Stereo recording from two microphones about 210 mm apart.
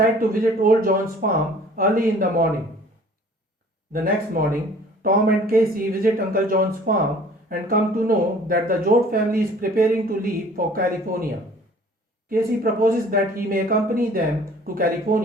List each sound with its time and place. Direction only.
0.2 s speech: 40° right (ahead or behind)
3.9 s speech: 45° right (ahead or behind)
12.3 s speech: 45° right (ahead or behind)